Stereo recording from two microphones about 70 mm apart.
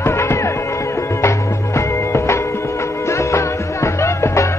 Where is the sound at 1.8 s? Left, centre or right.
Left.